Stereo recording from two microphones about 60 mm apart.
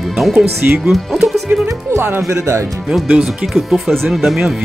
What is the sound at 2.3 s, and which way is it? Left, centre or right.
Speech, right.